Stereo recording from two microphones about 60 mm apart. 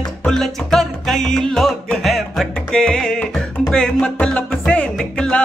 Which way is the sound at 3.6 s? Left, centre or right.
Centre.